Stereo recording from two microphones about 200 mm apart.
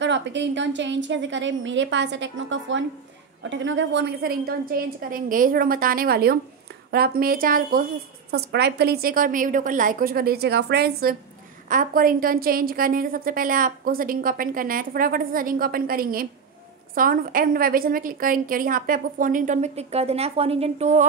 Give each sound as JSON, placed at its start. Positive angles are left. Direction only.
{"t": 0.0, "sound": "a woman's voice", "side_deg": -60}
{"t": 8.3, "sound": "a woman's voice", "side_deg": -55}